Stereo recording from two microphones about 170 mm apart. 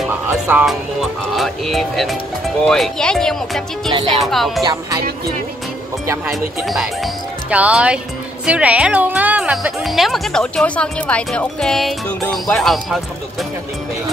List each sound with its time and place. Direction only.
0.3 s music: 10° right (ahead or behind)
1.3 s a woman's voice: centre (ahead or behind)
3.9 s speech: 30° right (ahead or behind)
4.2 s a woman's voice: centre (ahead or behind)
6.6 s a woman's voice: centre (ahead or behind)